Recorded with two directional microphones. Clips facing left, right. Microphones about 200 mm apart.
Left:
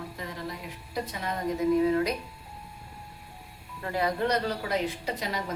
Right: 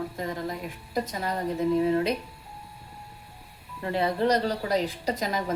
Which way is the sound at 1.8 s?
30° right (ahead or behind).